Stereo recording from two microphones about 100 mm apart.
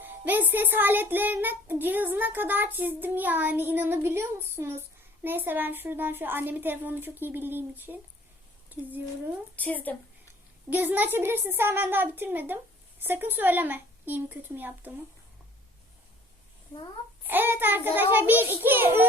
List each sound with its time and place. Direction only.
0.0 s a child's voice: 20° right (ahead or behind)
9.6 s a woman's voice: 15° left (ahead or behind)
10.7 s a child's voice: 20° right (ahead or behind)
17.2 s a child's voice: 20° right (ahead or behind)